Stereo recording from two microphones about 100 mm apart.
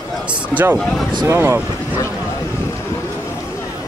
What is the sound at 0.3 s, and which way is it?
Speech, 15° right (ahead or behind).